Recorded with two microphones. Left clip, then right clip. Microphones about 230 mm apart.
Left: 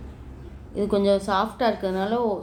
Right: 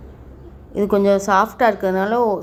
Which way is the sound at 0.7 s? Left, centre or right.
Right.